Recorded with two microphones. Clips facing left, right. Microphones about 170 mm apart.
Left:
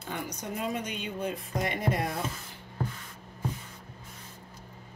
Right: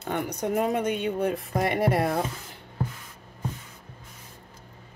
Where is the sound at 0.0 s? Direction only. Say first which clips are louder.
Right 8 dB; 60° right (ahead or behind).